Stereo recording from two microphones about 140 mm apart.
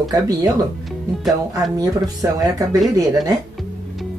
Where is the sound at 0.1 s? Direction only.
30° right (ahead or behind).